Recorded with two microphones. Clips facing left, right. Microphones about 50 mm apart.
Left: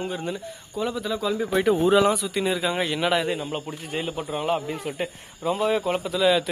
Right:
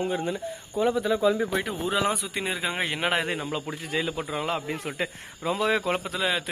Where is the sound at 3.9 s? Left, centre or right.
Right.